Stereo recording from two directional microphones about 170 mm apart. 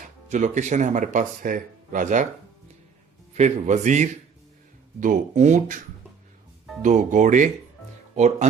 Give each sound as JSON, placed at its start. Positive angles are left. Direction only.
{"t": 0.3, "sound": "speech", "side_deg": -45}
{"t": 3.3, "sound": "speech", "side_deg": -45}
{"t": 6.8, "sound": "speech", "side_deg": -45}